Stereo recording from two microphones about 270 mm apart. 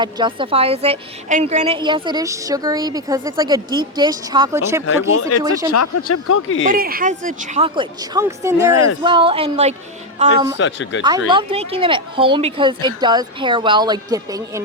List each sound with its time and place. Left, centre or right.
0.0 s a woman's voice: centre
4.9 s speech: left
5.4 s a woman's voice: centre
5.7 s speech: left
6.7 s speech: right
10.6 s speech: left
11.3 s a woman's voice: centre